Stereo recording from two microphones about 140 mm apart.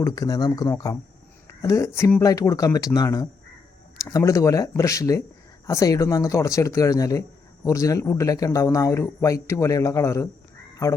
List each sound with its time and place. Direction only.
0.0 s speech: 25° left (ahead or behind)